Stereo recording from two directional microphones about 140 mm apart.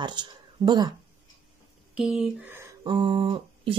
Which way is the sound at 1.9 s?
5° right (ahead or behind).